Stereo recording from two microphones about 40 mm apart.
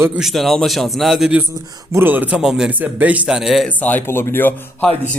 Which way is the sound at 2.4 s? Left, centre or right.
Centre.